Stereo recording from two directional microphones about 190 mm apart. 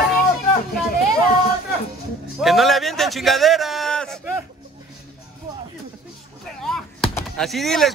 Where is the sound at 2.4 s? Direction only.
Centre (ahead or behind).